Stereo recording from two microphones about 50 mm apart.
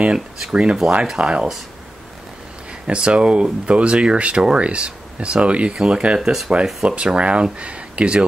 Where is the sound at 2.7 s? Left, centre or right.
Right.